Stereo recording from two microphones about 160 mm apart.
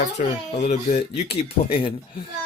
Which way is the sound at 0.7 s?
40° left (ahead or behind).